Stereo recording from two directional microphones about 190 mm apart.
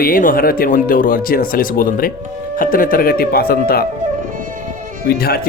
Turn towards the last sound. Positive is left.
turn(degrees=55)  # may be behind; listen again after turning